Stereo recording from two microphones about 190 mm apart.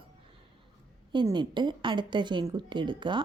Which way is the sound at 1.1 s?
25° right (ahead or behind).